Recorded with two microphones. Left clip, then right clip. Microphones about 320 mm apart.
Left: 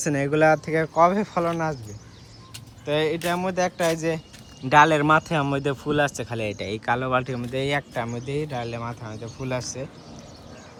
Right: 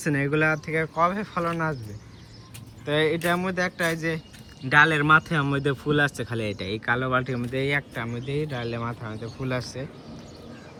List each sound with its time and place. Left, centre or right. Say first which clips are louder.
0.0 s speech: left 4 dB; centre
2.8 s speech: even; centre